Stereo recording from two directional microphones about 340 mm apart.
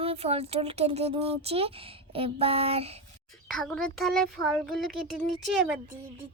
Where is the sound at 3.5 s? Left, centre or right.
Centre.